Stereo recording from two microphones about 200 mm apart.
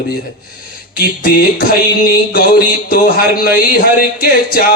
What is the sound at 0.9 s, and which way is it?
Speech, 45° left (ahead or behind).